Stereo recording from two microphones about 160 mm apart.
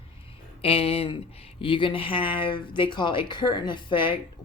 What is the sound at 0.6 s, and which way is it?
A woman's voice, 35° left (ahead or behind).